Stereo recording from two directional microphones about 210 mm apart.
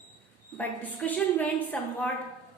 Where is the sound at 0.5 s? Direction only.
10° left (ahead or behind).